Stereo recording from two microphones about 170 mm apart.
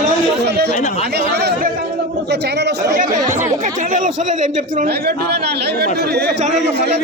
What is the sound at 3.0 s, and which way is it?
Speech, 50° right (ahead or behind).